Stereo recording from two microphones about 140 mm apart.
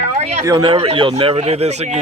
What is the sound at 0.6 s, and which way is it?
A man's voice, 40° right (ahead or behind).